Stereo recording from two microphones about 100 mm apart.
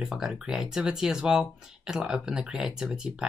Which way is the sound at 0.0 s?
5° right (ahead or behind).